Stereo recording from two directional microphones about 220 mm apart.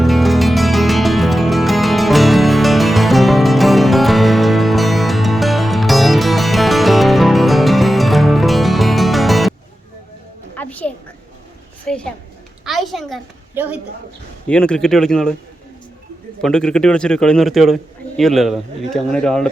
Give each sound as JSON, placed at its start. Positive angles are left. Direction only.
{"t": 0.0, "sound": "music", "side_deg": 0}
{"t": 10.5, "sound": "a sound", "side_deg": 5}
{"t": 14.4, "sound": "a man's voice", "side_deg": 5}
{"t": 16.4, "sound": "a man's voice", "side_deg": 5}